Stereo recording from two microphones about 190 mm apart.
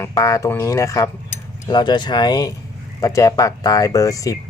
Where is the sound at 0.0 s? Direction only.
20° left (ahead or behind).